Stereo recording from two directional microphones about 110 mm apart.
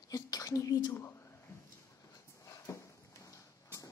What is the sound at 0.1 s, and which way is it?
Whispering, 35° left (ahead or behind).